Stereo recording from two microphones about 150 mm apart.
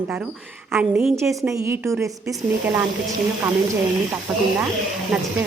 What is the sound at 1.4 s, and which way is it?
A woman's voice, 20° right (ahead or behind).